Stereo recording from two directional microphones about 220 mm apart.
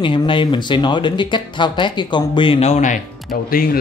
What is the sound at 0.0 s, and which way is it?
Speech, 20° left (ahead or behind).